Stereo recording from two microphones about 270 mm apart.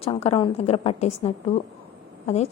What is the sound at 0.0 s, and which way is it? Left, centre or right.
A woman's voice, left.